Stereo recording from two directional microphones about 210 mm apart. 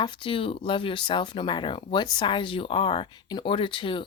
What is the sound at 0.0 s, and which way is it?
Speech, 25° left (ahead or behind).